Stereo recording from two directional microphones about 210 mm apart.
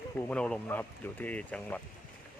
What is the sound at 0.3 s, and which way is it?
Speech, 5° left (ahead or behind).